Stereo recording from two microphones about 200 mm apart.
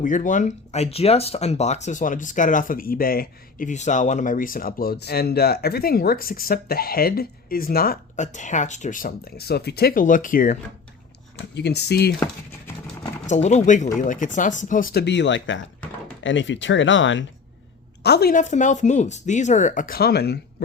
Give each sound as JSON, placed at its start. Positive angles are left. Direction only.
{"t": 0.0, "sound": "speech", "side_deg": 40}
{"t": 11.5, "sound": "speech", "side_deg": 55}
{"t": 13.2, "sound": "speech", "side_deg": 35}
{"t": 18.0, "sound": "speech", "side_deg": 55}